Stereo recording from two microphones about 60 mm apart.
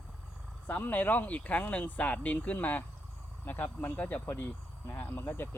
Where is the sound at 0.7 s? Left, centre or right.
Left.